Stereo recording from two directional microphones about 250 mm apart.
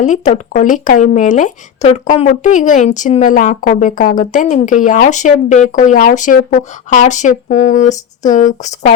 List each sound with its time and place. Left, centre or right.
0.0 s speech: left